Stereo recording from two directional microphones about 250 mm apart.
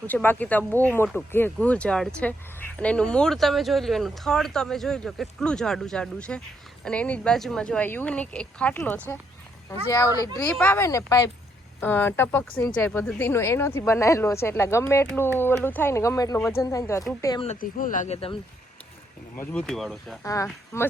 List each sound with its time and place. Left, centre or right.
0.1 s speech: centre
17.4 s speech: left
19.4 s speech: centre
20.2 s speech: centre